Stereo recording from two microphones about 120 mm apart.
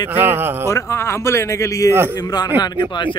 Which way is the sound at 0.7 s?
25° left (ahead or behind).